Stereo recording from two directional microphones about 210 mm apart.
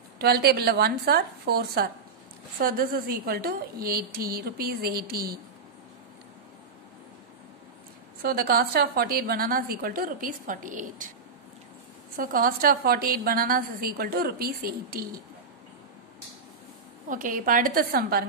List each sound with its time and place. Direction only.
0.2 s a woman's voice: 50° right (ahead or behind)
8.2 s a woman's voice: 45° right (ahead or behind)
12.2 s a woman's voice: 45° right (ahead or behind)
17.1 s a woman's voice: 40° right (ahead or behind)